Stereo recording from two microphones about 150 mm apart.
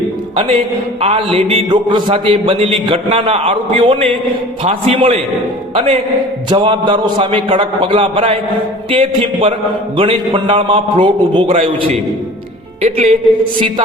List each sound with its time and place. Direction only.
1.0 s a man's voice: 40° right (ahead or behind)